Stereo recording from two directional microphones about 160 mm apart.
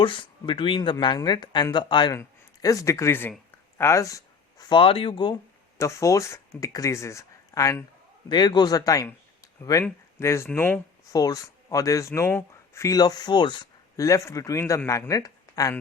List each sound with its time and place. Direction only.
0.0 s speech: 30° left (ahead or behind)
4.8 s speech: 35° left (ahead or behind)